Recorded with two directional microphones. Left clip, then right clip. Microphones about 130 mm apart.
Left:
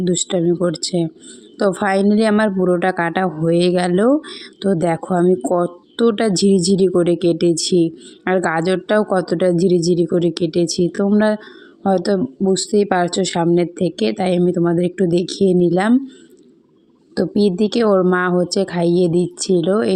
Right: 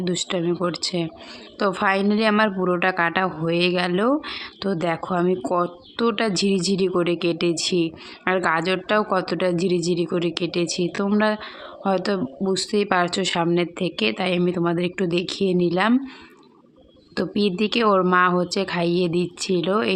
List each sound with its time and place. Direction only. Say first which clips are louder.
0.0 s speech: left 6 dB; 50° left (ahead or behind)
17.2 s speech: left 6 dB; 45° left (ahead or behind)